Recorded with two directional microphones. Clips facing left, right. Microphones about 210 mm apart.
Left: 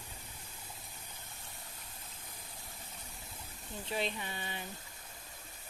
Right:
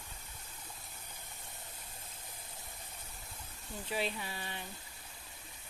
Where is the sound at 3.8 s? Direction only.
5° right (ahead or behind).